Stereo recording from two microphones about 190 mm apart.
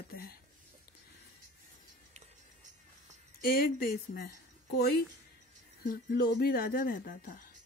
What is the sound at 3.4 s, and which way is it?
Speech, 50° left (ahead or behind).